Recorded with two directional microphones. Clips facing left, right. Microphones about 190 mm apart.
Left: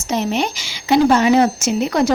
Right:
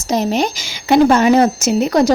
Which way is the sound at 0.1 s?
40° right (ahead or behind).